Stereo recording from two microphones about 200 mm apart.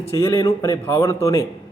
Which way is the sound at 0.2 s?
15° left (ahead or behind).